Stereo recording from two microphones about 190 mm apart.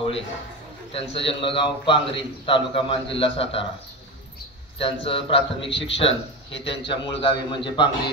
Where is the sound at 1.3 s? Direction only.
30° left (ahead or behind).